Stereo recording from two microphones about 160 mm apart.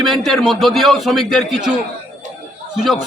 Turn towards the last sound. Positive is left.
turn(degrees=0)  # may be behind; listen again after turning